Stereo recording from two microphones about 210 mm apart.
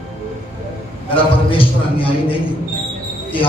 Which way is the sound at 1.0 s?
25° left (ahead or behind).